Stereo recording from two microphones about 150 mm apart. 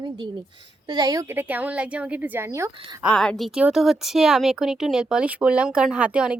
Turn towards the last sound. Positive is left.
turn(degrees=-5)  # may be behind; listen again after turning